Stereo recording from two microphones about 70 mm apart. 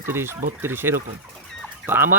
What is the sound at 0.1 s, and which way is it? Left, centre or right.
Speech, right.